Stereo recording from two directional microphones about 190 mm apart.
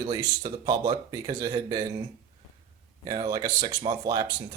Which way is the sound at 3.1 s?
20° right (ahead or behind).